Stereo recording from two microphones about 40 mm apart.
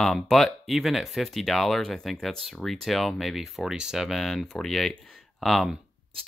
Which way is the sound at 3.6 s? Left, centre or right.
Centre.